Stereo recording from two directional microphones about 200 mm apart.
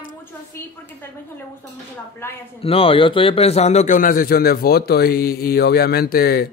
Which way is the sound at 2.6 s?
30° left (ahead or behind).